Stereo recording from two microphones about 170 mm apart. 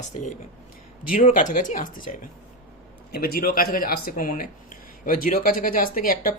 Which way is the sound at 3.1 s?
65° left (ahead or behind).